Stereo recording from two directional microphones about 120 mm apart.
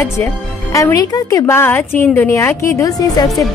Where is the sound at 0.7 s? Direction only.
30° left (ahead or behind).